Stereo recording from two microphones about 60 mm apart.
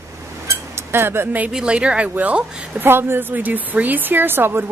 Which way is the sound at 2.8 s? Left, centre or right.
Right.